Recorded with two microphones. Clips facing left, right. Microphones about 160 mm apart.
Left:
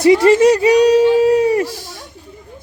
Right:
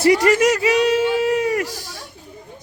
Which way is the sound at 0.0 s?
25° left (ahead or behind).